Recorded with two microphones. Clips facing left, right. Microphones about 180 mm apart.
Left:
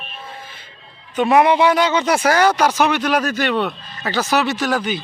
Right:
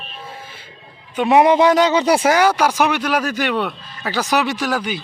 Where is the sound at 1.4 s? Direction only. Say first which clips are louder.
Right 2 dB; 40° right (ahead or behind).